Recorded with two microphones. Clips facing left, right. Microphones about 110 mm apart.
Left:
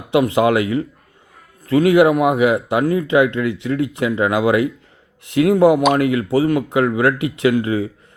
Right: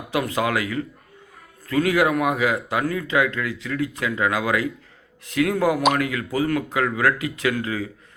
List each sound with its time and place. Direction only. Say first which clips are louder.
0.1 s speech: left 8 dB; 25° left (ahead or behind)